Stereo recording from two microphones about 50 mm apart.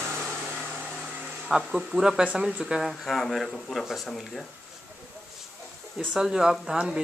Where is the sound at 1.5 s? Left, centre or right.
Centre.